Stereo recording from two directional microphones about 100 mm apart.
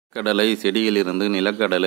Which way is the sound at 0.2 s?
10° left (ahead or behind).